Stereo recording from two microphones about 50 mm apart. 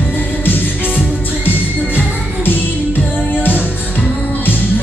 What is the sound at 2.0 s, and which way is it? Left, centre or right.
Music, left.